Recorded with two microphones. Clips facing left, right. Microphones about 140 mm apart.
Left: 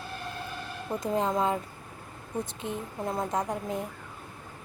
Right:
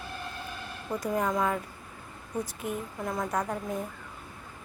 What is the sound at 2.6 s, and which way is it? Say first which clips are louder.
Speech: even; 25° left (ahead or behind).